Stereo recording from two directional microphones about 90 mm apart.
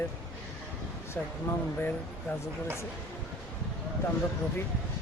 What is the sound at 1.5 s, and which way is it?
Speech, 30° left (ahead or behind).